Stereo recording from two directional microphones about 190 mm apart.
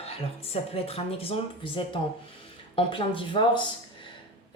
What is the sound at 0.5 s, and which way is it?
Speech, 30° left (ahead or behind).